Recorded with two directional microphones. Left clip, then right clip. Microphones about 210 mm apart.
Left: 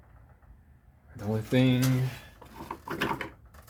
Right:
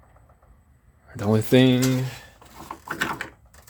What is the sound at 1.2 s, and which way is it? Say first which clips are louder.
Speech: right 9 dB; 50° right (ahead or behind).